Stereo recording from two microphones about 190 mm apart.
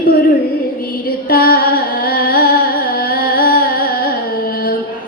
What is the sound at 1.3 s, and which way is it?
Singing, 50° left (ahead or behind).